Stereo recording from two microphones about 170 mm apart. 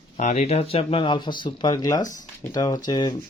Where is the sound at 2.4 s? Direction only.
20° left (ahead or behind).